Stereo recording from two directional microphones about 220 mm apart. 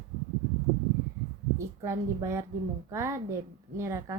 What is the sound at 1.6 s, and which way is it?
A woman's voice, 10° right (ahead or behind).